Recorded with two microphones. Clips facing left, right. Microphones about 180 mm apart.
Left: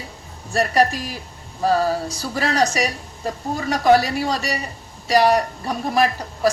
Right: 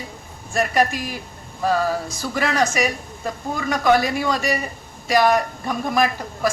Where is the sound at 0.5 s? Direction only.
35° left (ahead or behind).